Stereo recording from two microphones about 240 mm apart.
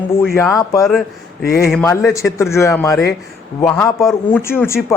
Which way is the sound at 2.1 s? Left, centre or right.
Centre.